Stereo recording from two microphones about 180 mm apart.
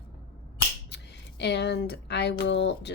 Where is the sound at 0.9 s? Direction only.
70° left (ahead or behind).